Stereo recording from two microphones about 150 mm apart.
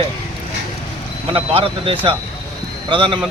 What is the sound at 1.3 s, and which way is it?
Speech, 40° right (ahead or behind).